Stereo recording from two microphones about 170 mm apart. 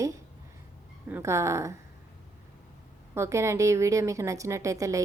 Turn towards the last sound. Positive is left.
turn(degrees=-20)  # may be behind; listen again after turning